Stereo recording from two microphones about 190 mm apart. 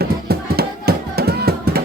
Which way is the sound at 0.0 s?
55° right (ahead or behind).